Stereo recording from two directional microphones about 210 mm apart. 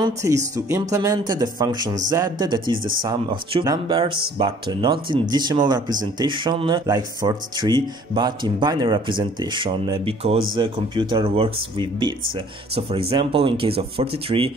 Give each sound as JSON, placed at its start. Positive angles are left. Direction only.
{"t": 0.0, "sound": "speech", "side_deg": -15}
{"t": 13.1, "sound": "speech", "side_deg": -25}